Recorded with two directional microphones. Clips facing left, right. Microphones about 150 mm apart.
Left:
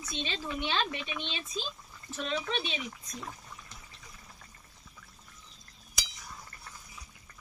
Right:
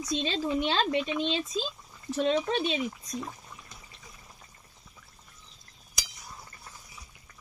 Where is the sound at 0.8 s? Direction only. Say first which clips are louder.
Right 10 dB; 20° right (ahead or behind).